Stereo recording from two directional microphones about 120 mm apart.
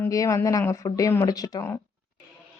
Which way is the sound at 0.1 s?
30° left (ahead or behind).